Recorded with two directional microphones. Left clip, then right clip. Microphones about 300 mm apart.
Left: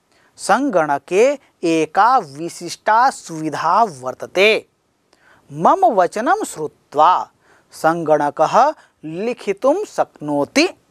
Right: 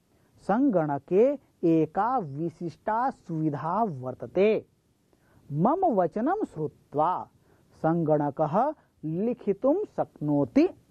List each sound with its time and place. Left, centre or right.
0.4 s speech: centre
10.0 s speech: centre
10.5 s speech: centre